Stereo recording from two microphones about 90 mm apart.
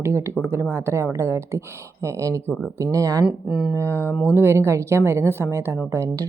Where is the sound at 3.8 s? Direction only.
30° right (ahead or behind).